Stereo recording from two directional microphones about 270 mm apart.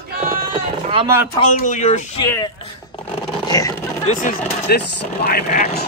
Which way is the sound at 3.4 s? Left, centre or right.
Centre.